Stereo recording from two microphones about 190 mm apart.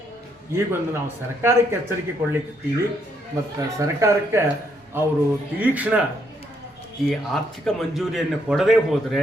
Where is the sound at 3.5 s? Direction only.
15° right (ahead or behind).